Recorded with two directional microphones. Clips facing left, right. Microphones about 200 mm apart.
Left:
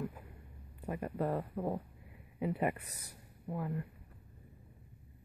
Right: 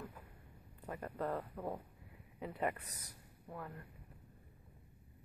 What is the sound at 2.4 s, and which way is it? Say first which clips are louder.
Speech: left 5 dB; 10° left (ahead or behind).